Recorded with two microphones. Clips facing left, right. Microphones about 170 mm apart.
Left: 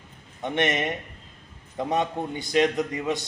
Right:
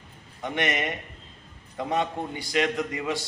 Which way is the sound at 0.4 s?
25° left (ahead or behind).